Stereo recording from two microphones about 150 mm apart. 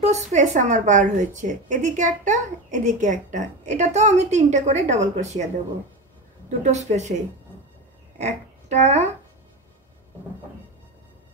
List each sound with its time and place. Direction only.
0.0 s a woman's voice: 50° right (ahead or behind)
6.6 s a woman's voice: 50° right (ahead or behind)
8.2 s speech: 50° right (ahead or behind)